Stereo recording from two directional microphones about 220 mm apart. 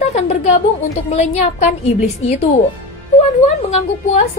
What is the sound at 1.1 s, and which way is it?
A woman's voice, 30° left (ahead or behind).